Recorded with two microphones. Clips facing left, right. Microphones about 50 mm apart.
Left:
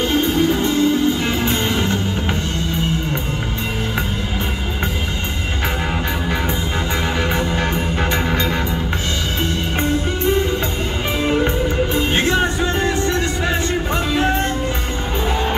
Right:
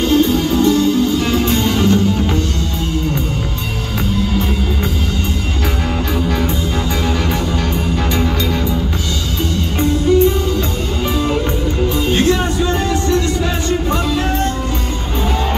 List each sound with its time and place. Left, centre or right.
0.1 s music: left
11.9 s music: left